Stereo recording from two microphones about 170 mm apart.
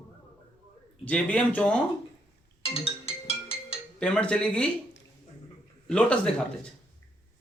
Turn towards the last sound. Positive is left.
turn(degrees=5)  # may be behind; listen again after turning